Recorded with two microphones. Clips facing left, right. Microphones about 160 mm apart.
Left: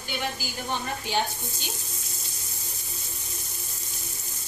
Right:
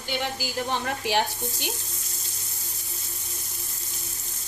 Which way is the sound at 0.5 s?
80° right.